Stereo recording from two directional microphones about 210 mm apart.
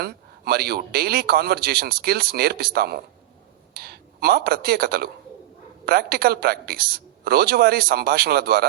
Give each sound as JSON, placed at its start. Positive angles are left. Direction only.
{"t": 0.0, "sound": "a man's voice", "side_deg": -45}